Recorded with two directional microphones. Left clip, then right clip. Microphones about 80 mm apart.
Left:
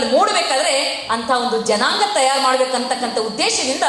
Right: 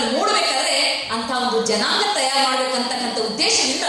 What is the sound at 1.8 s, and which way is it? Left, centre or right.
Speech, left.